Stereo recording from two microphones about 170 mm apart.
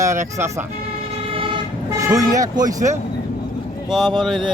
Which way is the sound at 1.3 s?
30° right (ahead or behind).